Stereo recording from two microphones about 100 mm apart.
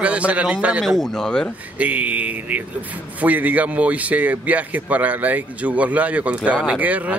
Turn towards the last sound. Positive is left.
turn(degrees=-15)  # may be behind; listen again after turning